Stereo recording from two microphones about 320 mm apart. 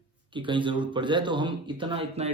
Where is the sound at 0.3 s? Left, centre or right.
Centre.